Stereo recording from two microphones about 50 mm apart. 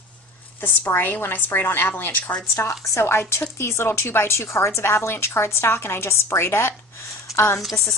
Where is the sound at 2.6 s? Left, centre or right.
Left.